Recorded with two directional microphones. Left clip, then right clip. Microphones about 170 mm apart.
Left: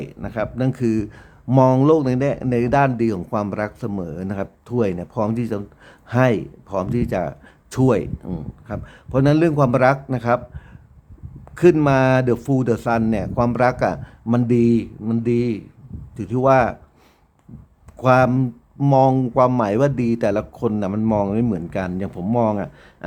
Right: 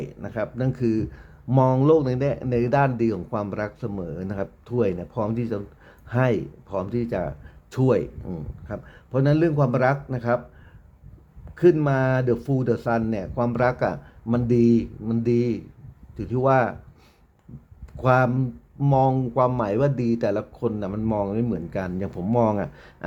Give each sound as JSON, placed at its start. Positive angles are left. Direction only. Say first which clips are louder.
{"t": 0.0, "sound": "speech", "louder": "left 3 dB", "side_deg": 10}
{"t": 11.5, "sound": "speech", "louder": "left 4 dB", "side_deg": 25}
{"t": 17.9, "sound": "speech", "louder": "left 5 dB", "side_deg": 15}